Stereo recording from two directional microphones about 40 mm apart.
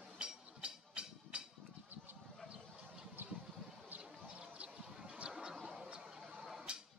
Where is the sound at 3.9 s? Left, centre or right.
Right.